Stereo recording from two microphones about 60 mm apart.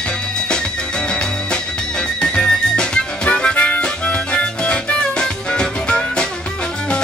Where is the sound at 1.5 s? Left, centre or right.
Centre.